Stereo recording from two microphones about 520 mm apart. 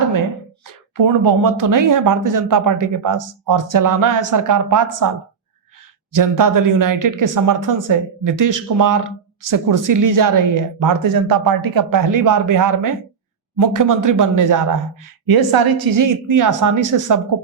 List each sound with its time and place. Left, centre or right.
0.9 s speech: right
6.1 s speech: right